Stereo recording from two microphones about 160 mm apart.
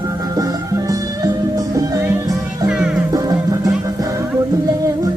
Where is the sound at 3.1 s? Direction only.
20° right (ahead or behind).